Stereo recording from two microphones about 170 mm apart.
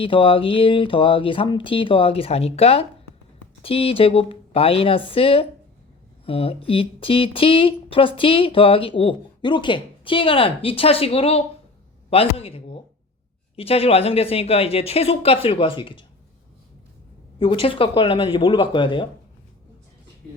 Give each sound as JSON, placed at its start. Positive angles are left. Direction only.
{"t": 0.0, "sound": "speech", "side_deg": 30}
{"t": 17.4, "sound": "speech", "side_deg": 30}